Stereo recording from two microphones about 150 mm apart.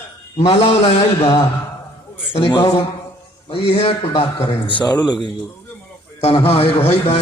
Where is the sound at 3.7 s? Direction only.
40° left (ahead or behind).